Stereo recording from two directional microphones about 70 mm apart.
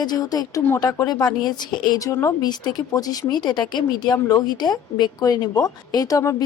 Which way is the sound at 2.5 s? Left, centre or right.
Left.